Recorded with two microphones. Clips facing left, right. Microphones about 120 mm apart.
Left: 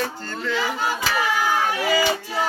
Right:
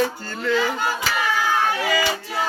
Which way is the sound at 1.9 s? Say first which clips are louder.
Left 2 dB; 30° left (ahead or behind).